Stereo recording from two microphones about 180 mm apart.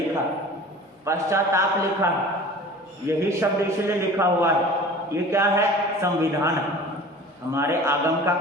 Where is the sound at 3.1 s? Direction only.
15° right (ahead or behind).